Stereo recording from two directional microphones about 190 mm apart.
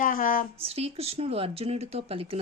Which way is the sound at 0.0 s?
45° left (ahead or behind).